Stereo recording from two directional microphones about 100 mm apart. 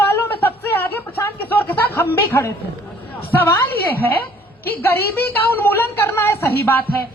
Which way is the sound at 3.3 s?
25° left (ahead or behind).